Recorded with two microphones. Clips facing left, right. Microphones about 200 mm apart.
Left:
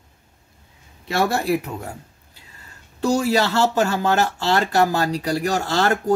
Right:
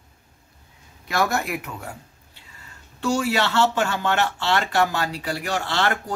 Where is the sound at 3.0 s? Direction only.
40° left (ahead or behind).